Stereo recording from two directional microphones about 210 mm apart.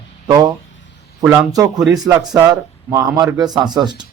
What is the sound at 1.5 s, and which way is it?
Speech, 20° right (ahead or behind).